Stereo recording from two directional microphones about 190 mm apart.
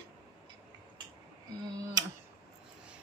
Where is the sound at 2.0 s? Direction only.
20° right (ahead or behind).